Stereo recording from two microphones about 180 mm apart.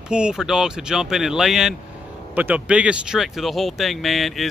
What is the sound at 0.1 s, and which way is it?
Speech, 5° right (ahead or behind).